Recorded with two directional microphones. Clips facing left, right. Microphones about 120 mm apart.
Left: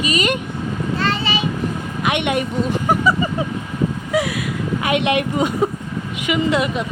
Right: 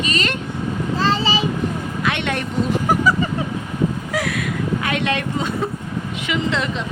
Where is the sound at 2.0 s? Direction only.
15° left (ahead or behind).